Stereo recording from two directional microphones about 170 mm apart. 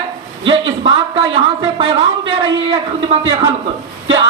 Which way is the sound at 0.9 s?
30° right (ahead or behind).